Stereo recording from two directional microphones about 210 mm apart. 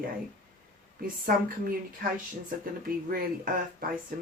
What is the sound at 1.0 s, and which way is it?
Speech, 40° right (ahead or behind).